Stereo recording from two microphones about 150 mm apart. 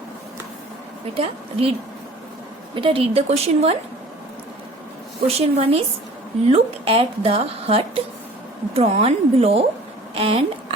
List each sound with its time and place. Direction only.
1.2 s a woman's voice: 40° right (ahead or behind)
2.7 s a woman's voice: 35° right (ahead or behind)
5.4 s a woman's voice: 45° right (ahead or behind)